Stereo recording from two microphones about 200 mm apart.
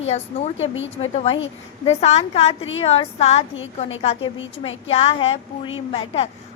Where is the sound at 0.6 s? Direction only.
70° left (ahead or behind).